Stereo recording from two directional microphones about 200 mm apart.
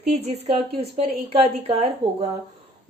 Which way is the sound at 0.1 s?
30° right (ahead or behind).